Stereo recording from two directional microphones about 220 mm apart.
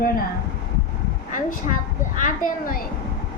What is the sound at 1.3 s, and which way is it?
A woman's voice, 35° left (ahead or behind).